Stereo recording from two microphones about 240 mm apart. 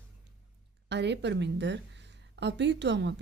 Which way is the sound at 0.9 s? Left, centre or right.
Right.